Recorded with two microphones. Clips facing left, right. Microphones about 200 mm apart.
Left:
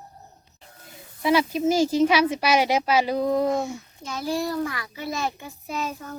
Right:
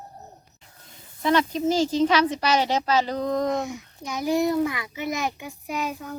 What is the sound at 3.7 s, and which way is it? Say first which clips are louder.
A child's voice: right 1 dB; 15° right (ahead or behind).